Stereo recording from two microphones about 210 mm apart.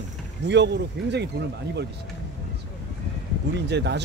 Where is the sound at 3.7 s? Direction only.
55° right (ahead or behind).